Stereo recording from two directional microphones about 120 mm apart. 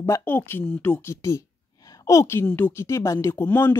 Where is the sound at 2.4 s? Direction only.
15° left (ahead or behind).